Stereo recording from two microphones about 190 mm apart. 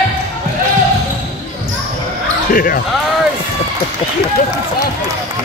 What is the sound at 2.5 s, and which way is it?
Basketball bounce, 45° left (ahead or behind).